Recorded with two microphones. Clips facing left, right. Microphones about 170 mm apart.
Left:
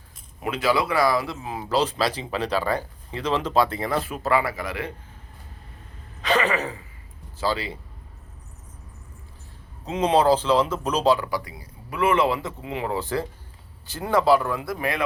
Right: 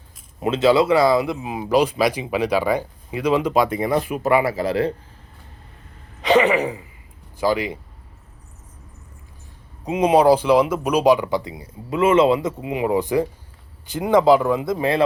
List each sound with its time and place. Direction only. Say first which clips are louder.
0.3 s speech: right 7 dB; 25° right (ahead or behind)
6.2 s speech: right 7 dB; 20° right (ahead or behind)
9.8 s speech: right 5 dB; 10° right (ahead or behind)